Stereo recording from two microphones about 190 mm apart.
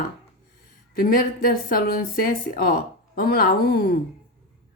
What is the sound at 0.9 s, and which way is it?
A woman's voice, 50° left (ahead or behind).